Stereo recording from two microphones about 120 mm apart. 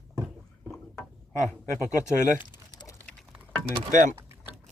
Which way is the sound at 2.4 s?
35° left (ahead or behind).